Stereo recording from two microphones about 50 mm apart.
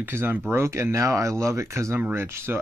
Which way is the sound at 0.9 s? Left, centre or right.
Right.